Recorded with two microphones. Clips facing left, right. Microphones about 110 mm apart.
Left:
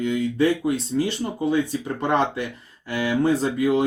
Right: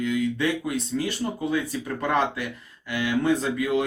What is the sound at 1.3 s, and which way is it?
Speech, 25° left (ahead or behind).